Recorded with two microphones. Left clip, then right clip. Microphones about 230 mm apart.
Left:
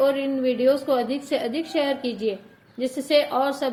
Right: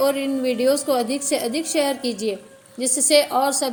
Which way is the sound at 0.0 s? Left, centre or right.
Right.